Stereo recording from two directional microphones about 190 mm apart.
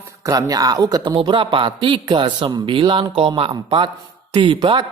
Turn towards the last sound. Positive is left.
turn(degrees=-25)  # may be behind; listen again after turning